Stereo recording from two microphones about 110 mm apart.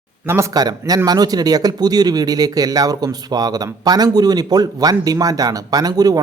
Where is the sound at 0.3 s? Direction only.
25° right (ahead or behind).